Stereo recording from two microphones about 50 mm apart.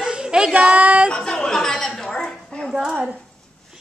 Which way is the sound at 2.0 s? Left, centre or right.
Centre.